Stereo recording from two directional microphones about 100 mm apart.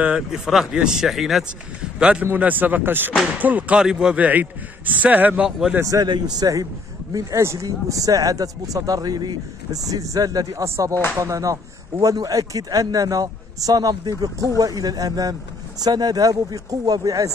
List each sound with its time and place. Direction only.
0.0 s speech: 5° right (ahead or behind)
5.8 s speech: 35° right (ahead or behind)